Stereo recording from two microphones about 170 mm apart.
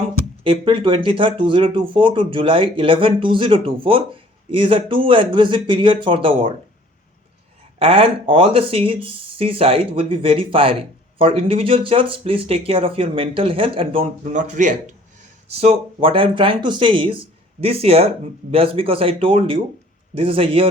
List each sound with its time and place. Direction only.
0.4 s speech: 30° right (ahead or behind)
7.8 s speech: 35° right (ahead or behind)
14.3 s speech: 45° right (ahead or behind)
15.6 s speech: 35° right (ahead or behind)